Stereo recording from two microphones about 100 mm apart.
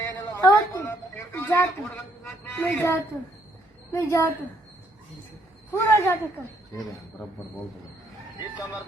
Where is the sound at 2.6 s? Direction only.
25° left (ahead or behind).